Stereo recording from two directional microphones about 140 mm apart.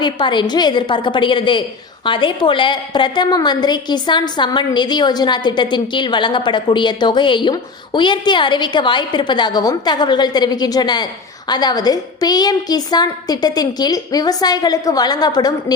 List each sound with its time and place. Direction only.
0.0 s a woman's voice: 35° left (ahead or behind)